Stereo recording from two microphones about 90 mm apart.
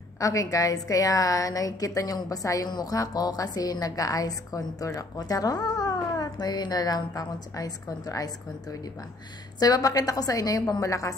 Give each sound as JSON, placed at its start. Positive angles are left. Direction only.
{"t": 0.2, "sound": "a woman's voice", "side_deg": 40}
{"t": 9.6, "sound": "a woman's voice", "side_deg": 45}